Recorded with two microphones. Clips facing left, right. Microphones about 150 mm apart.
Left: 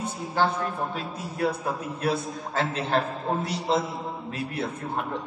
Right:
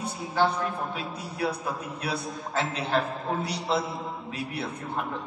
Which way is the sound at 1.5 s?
50° left (ahead or behind).